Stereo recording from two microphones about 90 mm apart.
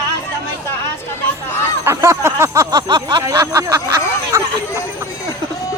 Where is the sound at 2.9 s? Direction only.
55° right (ahead or behind).